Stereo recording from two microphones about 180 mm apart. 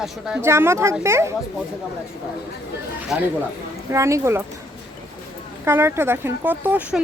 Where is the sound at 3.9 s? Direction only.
15° right (ahead or behind).